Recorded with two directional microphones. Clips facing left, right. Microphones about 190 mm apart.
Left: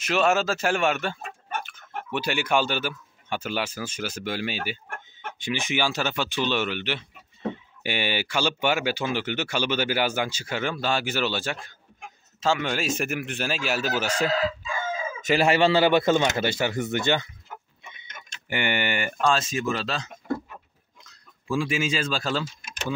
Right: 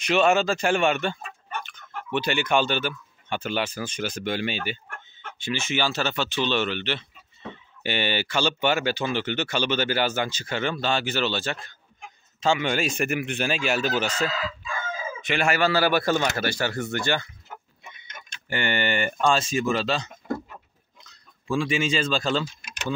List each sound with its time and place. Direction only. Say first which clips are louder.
0.0 s speech: right 2 dB; centre (ahead or behind)
15.2 s speech: left 3 dB; 30° left (ahead or behind)
18.5 s speech: right 1 dB; 15° left (ahead or behind)